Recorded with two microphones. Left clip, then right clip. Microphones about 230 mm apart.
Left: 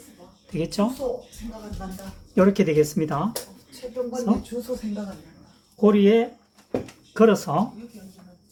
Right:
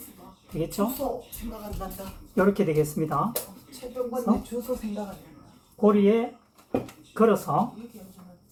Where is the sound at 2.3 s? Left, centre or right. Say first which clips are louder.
Left 4 dB; left.